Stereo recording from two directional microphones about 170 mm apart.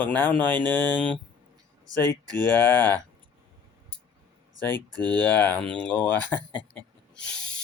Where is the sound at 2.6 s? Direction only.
10° left (ahead or behind).